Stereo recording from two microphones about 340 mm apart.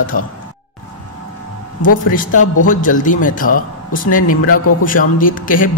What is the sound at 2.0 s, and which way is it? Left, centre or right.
Speech, left.